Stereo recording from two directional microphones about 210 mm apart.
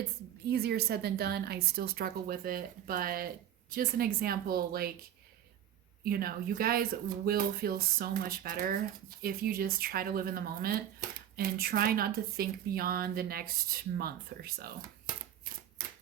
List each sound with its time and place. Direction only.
0.5 s speech: 50° right (ahead or behind)
6.1 s speech: 45° right (ahead or behind)